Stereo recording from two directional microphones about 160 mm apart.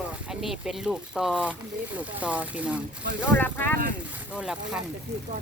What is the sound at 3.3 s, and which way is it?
Speech, 10° left (ahead or behind).